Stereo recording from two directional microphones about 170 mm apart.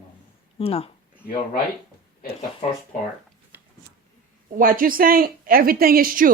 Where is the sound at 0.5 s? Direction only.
35° left (ahead or behind).